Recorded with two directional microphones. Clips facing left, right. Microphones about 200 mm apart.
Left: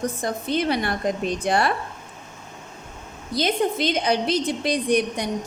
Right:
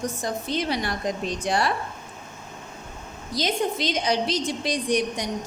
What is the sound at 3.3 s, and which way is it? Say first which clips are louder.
A woman's voice: left 3 dB; 55° left (ahead or behind).